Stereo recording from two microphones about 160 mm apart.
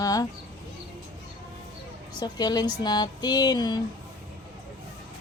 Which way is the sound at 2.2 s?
25° left (ahead or behind).